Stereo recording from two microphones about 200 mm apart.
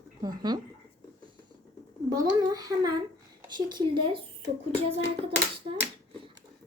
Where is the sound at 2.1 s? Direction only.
20° right (ahead or behind).